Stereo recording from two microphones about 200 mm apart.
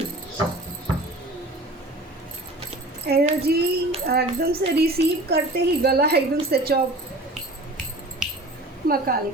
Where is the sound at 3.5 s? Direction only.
50° right (ahead or behind).